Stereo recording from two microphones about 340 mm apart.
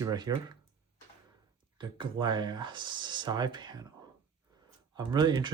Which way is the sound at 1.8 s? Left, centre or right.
Centre.